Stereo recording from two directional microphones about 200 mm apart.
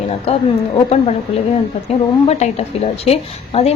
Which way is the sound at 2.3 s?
35° left (ahead or behind).